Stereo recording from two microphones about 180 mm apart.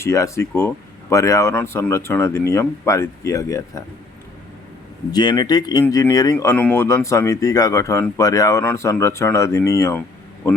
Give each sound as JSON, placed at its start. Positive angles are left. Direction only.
{"t": 0.0, "sound": "speech", "side_deg": 15}
{"t": 5.1, "sound": "speech", "side_deg": 25}
{"t": 6.3, "sound": "speech", "side_deg": 10}